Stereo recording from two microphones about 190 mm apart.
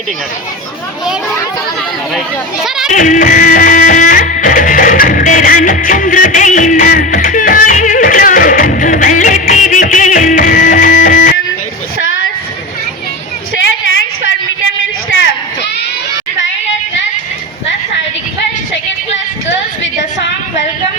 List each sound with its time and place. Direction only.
2.1 s speech: centre (ahead or behind)
2.9 s music: 45° left (ahead or behind)